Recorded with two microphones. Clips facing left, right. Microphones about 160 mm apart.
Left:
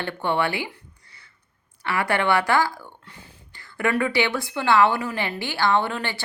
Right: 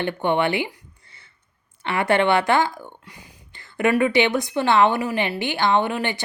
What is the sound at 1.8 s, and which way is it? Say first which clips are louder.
Speech: right 4 dB; 25° right (ahead or behind).